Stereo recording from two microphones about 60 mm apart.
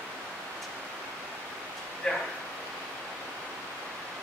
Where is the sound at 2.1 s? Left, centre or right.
Centre.